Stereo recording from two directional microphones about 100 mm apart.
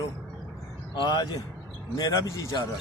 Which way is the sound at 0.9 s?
50° left (ahead or behind).